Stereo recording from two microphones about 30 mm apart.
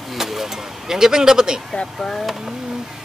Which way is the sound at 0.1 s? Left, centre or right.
Centre.